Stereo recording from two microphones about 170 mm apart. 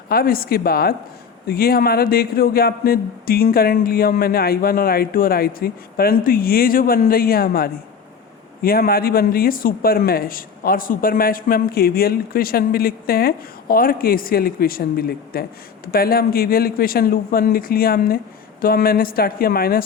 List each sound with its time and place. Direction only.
0.1 s speech: 60° left (ahead or behind)